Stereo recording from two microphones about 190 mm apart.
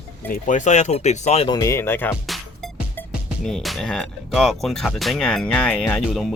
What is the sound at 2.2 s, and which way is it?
Music, centre (ahead or behind).